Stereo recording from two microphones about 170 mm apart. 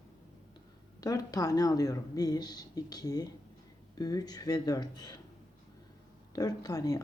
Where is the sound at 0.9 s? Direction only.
20° left (ahead or behind).